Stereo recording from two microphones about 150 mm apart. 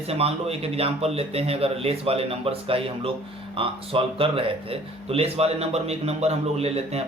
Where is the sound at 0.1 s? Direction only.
45° right (ahead or behind).